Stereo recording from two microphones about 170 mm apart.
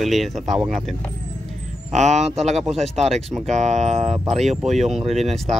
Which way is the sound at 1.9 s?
40° right (ahead or behind).